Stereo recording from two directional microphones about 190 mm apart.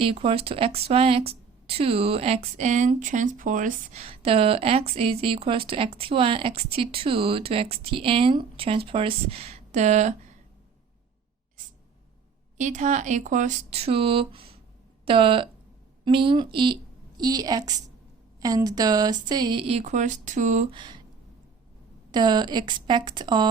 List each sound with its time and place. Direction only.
0.0 s speech: 30° right (ahead or behind)
12.5 s speech: 40° right (ahead or behind)
20.7 s speech: 25° right (ahead or behind)
22.1 s speech: 20° right (ahead or behind)